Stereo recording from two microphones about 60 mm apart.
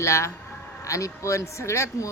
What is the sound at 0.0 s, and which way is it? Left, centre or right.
A woman's voice, left.